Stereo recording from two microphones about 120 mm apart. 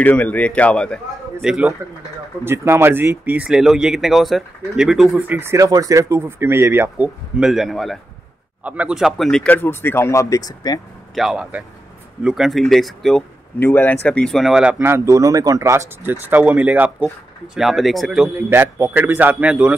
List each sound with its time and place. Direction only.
0.0 s speech: 15° left (ahead or behind)
1.4 s speech: 5° right (ahead or behind)
2.4 s speech: 20° right (ahead or behind)
7.3 s speech: 5° right (ahead or behind)
8.6 s speech: 10° right (ahead or behind); by 10.8 s 30° left (ahead or behind)
11.1 s speech: 5° right (ahead or behind)
13.6 s speech: 15° left (ahead or behind); by 14.8 s 5° right (ahead or behind)
14.8 s speech: 20° right (ahead or behind); by 18.3 s 5° right (ahead or behind)
18.5 s speech: 20° right (ahead or behind)